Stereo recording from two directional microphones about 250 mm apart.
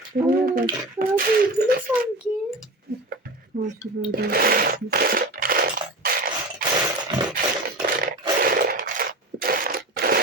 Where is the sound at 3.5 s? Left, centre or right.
Right.